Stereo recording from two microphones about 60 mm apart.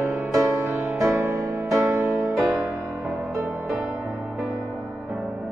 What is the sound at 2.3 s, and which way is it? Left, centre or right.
Music, centre.